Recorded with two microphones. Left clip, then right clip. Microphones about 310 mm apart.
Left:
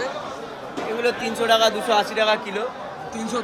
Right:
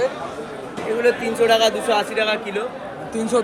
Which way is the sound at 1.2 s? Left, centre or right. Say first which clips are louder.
Right 2 dB; left.